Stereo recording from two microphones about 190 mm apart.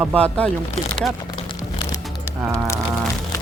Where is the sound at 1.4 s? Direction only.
20° left (ahead or behind).